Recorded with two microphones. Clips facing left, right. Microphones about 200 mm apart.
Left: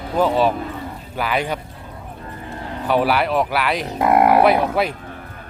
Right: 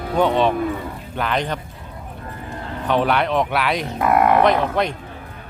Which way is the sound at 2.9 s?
5° left (ahead or behind).